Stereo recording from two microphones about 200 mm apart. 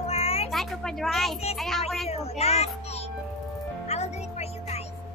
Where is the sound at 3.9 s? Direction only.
35° left (ahead or behind).